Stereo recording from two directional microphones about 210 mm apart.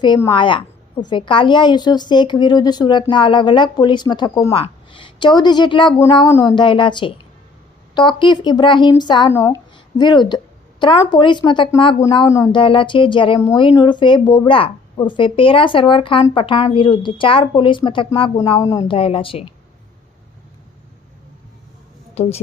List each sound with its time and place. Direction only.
0.0 s a woman's voice: 20° left (ahead or behind)
22.1 s a woman's voice: 30° left (ahead or behind)